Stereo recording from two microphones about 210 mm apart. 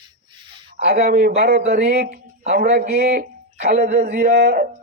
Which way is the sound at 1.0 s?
45° right (ahead or behind).